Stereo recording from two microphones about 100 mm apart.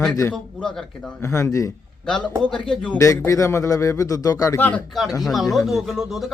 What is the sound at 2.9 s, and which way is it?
Speech, 30° left (ahead or behind).